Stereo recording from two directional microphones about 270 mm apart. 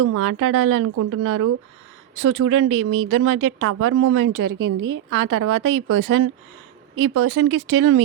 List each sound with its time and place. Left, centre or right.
0.2 s a woman's voice: right
4.2 s a woman's voice: right